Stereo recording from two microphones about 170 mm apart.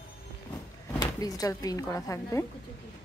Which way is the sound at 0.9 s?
20° left (ahead or behind).